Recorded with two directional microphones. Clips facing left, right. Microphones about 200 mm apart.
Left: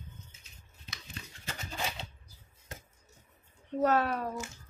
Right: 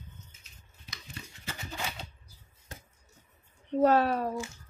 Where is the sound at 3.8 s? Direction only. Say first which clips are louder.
Right 4 dB; 30° right (ahead or behind).